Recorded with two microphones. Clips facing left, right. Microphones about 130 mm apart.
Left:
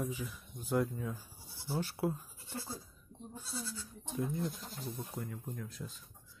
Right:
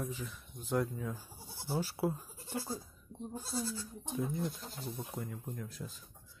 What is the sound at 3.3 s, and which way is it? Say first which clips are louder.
Speech: right 6 dB; 40° right (ahead or behind).